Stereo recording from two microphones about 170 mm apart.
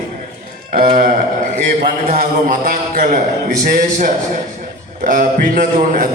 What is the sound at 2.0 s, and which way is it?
A man's voice, 50° right (ahead or behind).